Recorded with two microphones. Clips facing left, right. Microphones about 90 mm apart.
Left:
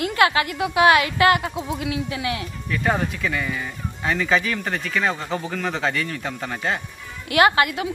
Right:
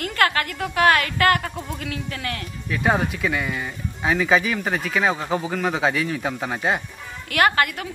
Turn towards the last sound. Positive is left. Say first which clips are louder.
# left 2 dB
turn(degrees=20)  # may be behind; listen again after turning